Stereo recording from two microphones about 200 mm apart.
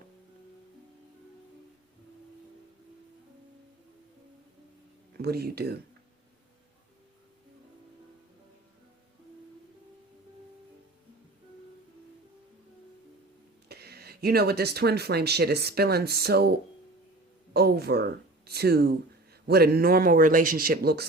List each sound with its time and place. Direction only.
5.1 s speech: 50° right (ahead or behind)
13.7 s speech: 55° right (ahead or behind)